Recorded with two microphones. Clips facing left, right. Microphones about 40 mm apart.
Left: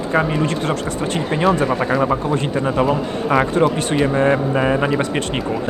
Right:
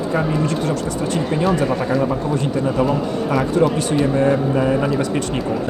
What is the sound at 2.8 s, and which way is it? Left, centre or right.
A man's voice, left.